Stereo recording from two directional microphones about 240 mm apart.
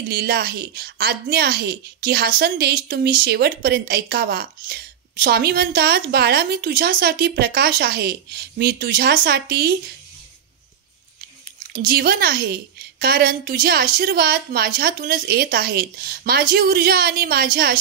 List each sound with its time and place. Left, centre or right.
0.1 s a woman's voice: right
11.7 s a woman's voice: right